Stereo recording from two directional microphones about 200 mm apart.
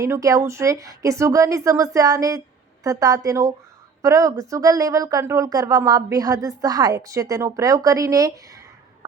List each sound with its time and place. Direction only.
0.0 s speech: 15° right (ahead or behind)